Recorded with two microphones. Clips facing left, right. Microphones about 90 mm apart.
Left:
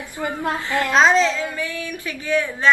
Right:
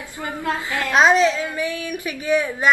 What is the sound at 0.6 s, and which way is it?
A woman's voice, 20° right (ahead or behind).